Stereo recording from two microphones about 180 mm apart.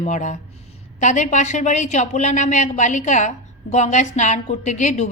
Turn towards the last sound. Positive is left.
turn(degrees=40)  # may be behind; listen again after turning